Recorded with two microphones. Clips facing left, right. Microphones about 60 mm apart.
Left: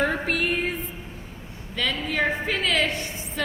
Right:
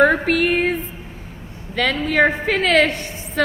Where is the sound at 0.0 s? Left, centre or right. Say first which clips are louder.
Right 9 dB; right.